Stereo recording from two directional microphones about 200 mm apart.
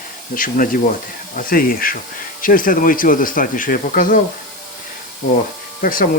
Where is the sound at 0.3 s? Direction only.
45° left (ahead or behind).